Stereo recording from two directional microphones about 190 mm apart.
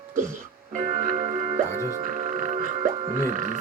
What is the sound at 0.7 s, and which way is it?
Music, 40° right (ahead or behind).